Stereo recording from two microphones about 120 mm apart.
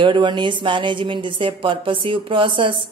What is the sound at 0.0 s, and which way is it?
A woman's voice, 40° right (ahead or behind).